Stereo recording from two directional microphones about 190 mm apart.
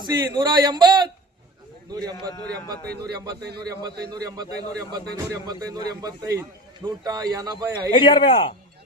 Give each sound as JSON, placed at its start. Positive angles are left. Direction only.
{"t": 0.0, "sound": "speech", "side_deg": -25}
{"t": 3.6, "sound": "speech", "side_deg": -20}
{"t": 7.9, "sound": "speech", "side_deg": 25}